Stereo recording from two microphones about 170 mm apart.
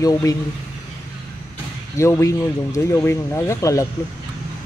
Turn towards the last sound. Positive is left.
turn(degrees=20)  # may be behind; listen again after turning